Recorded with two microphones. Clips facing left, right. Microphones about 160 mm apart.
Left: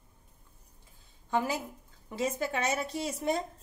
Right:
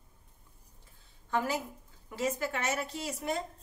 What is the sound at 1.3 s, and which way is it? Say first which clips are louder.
A woman's voice: left 1 dB; 20° left (ahead or behind).